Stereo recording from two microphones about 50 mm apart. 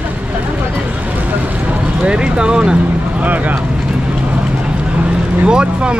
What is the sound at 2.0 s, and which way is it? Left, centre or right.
Speech, centre.